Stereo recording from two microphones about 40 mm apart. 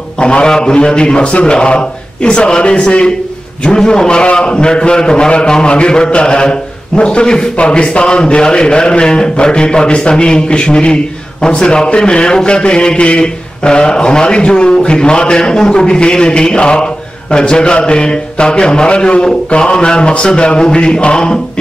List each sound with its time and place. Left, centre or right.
0.2 s a man's voice: left